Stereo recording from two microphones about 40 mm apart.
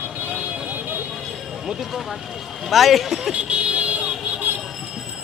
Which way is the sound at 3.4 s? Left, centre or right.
Right.